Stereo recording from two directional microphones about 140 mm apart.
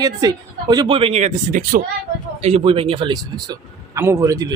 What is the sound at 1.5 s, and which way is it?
Speech, 75° right (ahead or behind).